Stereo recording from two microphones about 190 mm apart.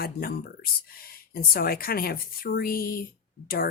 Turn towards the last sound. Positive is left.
turn(degrees=50)  # may be behind; listen again after turning